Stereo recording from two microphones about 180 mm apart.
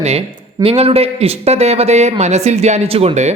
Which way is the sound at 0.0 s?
35° right (ahead or behind).